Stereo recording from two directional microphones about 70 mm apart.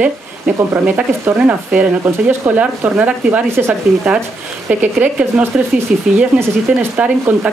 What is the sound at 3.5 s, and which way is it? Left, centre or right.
Speech, right.